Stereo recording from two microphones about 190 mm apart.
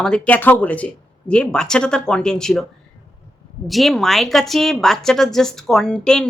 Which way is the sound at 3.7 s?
Centre (ahead or behind).